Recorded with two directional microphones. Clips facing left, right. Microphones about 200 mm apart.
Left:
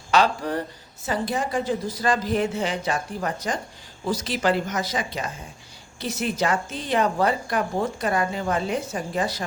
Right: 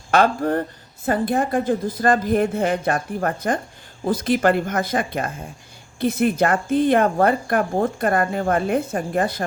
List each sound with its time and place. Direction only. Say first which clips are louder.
0.1 s a woman's voice: right 4 dB; 55° right (ahead or behind)